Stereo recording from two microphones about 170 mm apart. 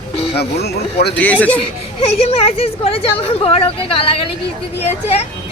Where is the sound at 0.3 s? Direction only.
70° left (ahead or behind).